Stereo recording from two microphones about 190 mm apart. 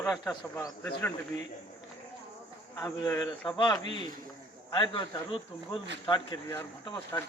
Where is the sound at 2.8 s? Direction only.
15° left (ahead or behind).